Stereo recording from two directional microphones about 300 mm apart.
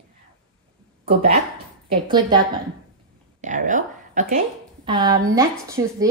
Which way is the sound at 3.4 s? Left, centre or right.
Right.